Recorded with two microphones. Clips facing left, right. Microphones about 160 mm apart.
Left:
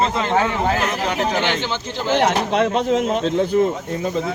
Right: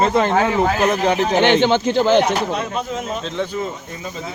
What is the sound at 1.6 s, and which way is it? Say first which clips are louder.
Speech: right 10 dB; 60° right (ahead or behind).